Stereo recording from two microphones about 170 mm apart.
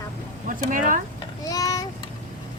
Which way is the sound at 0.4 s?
50° right (ahead or behind).